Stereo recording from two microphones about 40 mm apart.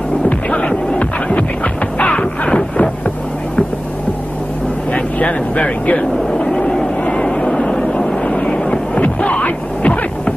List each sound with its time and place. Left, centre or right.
0.3 s music: left
4.9 s vehicle: left
6.4 s vehicle: centre
9.0 s a sound: left